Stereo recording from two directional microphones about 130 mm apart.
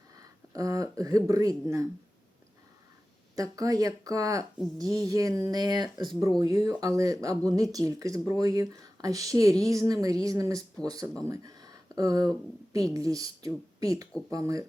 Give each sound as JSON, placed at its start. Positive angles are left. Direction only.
{"t": 0.2, "sound": "speech", "side_deg": -25}
{"t": 3.3, "sound": "speech", "side_deg": -25}